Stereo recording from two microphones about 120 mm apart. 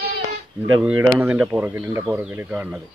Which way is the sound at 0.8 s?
10° right (ahead or behind).